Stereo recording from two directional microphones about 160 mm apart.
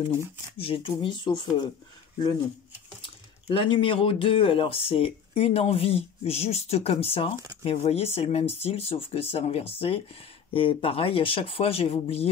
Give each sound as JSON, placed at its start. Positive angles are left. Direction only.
{"t": 0.6, "sound": "speech", "side_deg": 35}
{"t": 3.4, "sound": "speech", "side_deg": 30}